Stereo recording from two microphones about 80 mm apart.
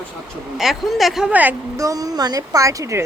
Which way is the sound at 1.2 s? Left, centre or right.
Centre.